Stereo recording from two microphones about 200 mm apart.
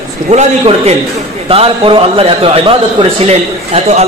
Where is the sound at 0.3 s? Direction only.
35° right (ahead or behind).